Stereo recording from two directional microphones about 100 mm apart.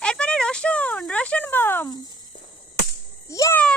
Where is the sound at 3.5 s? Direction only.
15° left (ahead or behind).